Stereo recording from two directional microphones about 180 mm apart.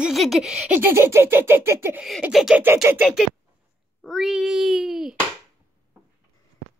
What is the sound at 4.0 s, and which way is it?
A child's voice, centre (ahead or behind).